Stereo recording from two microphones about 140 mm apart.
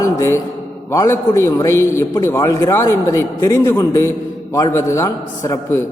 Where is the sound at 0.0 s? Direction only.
20° left (ahead or behind).